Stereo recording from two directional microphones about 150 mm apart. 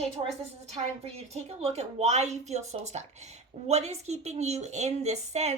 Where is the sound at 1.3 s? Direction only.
45° right (ahead or behind).